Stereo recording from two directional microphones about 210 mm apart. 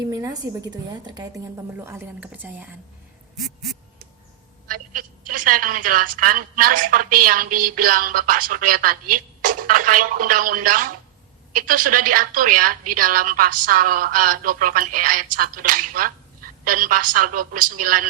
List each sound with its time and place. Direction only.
0.0 s a woman's voice: 15° right (ahead or behind)
1.8 s a woman's voice: 10° right (ahead or behind)
4.7 s telephone: 40° right (ahead or behind)
5.3 s a woman's voice: 40° right (ahead or behind)